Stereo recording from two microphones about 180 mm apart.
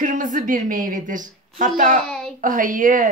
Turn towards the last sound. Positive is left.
turn(degrees=-45)  # may be behind; listen again after turning